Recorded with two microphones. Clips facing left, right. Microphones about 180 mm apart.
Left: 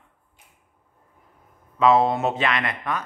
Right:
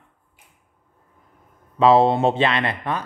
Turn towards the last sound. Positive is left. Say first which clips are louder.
# right 3 dB
turn(degrees=-30)  # may be behind; listen again after turning